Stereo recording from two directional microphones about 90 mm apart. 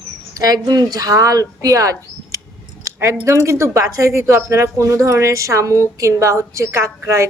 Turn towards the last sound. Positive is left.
turn(degrees=-30)  # may be behind; listen again after turning